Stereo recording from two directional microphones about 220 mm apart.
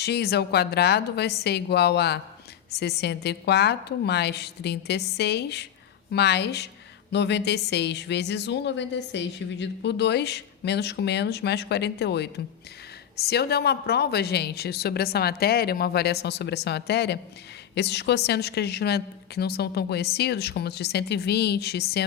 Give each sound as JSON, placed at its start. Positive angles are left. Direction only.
{"t": 0.0, "sound": "a woman's voice", "side_deg": 45}